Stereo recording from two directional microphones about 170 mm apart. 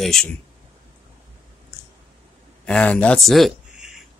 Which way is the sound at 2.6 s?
5° left (ahead or behind).